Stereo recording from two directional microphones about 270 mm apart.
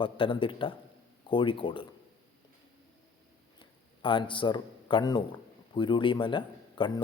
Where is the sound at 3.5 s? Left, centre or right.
Centre.